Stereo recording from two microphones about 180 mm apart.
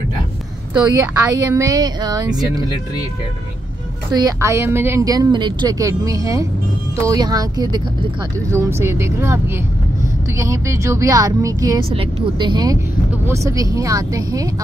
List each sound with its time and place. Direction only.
0.7 s speech: 15° right (ahead or behind)
4.1 s speech: 20° right (ahead or behind)